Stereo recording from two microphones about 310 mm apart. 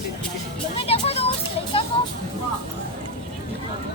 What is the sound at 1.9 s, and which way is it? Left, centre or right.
Vehicle, centre.